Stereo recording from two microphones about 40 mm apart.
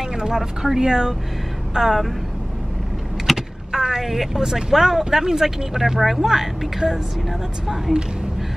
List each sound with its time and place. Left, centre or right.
0.0 s speech: centre
3.3 s vehicle: centre
4.4 s speech: centre